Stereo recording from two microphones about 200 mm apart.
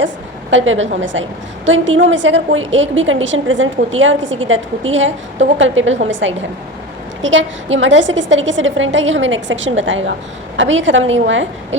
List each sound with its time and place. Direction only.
0.5 s a woman's voice: 75° right (ahead or behind)